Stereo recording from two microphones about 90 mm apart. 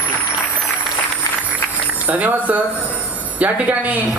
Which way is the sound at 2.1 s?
15° right (ahead or behind).